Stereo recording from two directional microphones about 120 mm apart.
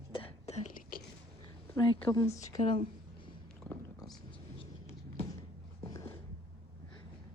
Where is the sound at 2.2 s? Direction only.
25° left (ahead or behind).